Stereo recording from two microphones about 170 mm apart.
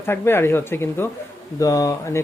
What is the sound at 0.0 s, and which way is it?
Speech, 15° left (ahead or behind).